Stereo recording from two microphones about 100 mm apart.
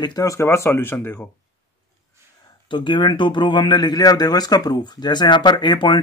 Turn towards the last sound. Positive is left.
turn(degrees=55)  # may be behind; listen again after turning